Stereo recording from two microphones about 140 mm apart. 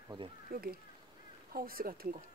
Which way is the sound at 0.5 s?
90° right.